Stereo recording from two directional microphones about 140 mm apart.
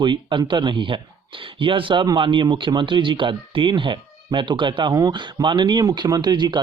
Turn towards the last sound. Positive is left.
turn(degrees=-30)  # may be behind; listen again after turning